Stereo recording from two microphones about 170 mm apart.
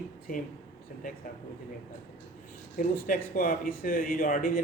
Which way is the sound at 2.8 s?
55° left (ahead or behind).